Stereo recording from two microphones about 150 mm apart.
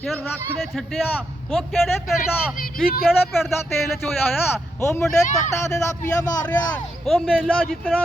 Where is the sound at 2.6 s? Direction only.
80° left.